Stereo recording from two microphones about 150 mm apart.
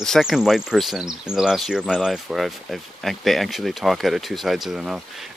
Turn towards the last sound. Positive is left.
turn(degrees=-5)  # may be behind; listen again after turning